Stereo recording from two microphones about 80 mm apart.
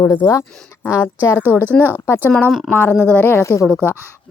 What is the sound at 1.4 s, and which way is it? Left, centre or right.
Speech, right.